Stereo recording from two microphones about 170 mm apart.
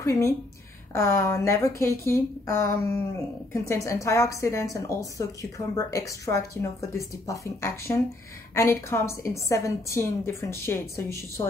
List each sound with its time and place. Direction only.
0.0 s a woman's voice: 20° left (ahead or behind)